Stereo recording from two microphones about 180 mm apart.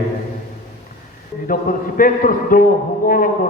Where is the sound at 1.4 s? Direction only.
50° left (ahead or behind).